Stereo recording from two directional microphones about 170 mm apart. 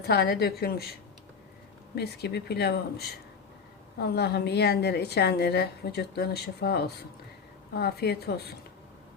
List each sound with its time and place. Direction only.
0.0 s a woman's voice: 75° left (ahead or behind)
2.0 s a woman's voice: 70° left (ahead or behind)